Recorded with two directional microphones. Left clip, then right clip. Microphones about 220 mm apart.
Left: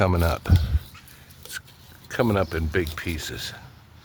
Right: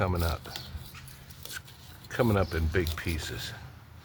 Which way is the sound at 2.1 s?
45° left (ahead or behind).